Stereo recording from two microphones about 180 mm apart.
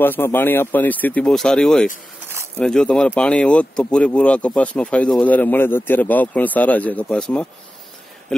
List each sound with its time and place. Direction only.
0.0 s speech: 10° left (ahead or behind)